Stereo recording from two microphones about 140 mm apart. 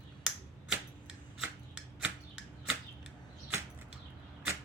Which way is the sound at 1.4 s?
5° right (ahead or behind).